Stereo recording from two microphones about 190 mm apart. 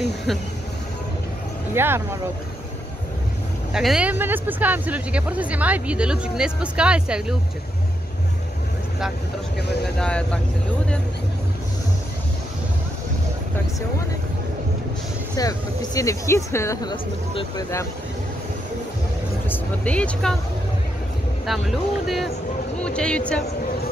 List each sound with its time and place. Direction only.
1.7 s speech: 10° right (ahead or behind)
3.7 s speech: 5° right (ahead or behind)
9.9 s speech: 5° left (ahead or behind)
15.3 s speech: 20° left (ahead or behind)
16.9 s speech: 25° left (ahead or behind)
19.5 s speech: 5° left (ahead or behind)
21.5 s speech: centre (ahead or behind)